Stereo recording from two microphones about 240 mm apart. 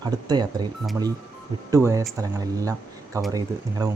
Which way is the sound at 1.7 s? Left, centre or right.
Centre.